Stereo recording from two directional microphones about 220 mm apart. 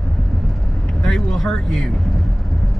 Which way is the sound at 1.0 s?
Centre (ahead or behind).